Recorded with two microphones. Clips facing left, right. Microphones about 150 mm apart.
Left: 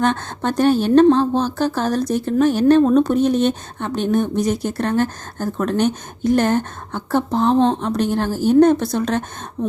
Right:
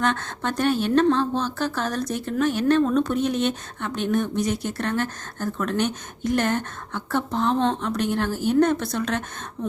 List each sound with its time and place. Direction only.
0.0 s speech: 35° left (ahead or behind)